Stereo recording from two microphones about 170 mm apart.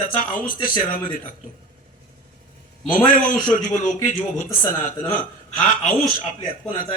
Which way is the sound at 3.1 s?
50° left (ahead or behind).